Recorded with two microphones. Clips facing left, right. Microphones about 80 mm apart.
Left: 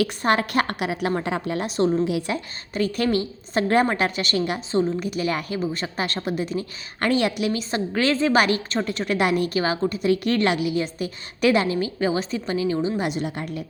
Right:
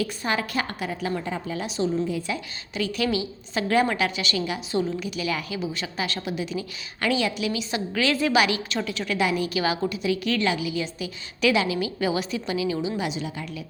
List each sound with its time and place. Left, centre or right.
0.2 s a woman's voice: left
2.0 s a woman's voice: left
2.3 s a woman's voice: left
8.1 s a woman's voice: left
8.4 s a woman's voice: left
9.6 s a woman's voice: left
11.9 s a woman's voice: left
13.0 s a woman's voice: left